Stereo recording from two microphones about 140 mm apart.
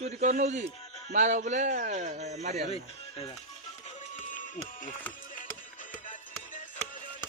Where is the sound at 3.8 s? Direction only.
60° left (ahead or behind).